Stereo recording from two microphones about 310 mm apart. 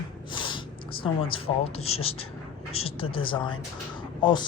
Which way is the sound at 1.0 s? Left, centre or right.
Centre.